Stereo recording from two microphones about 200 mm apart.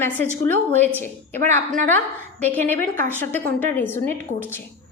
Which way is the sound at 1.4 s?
40° right (ahead or behind).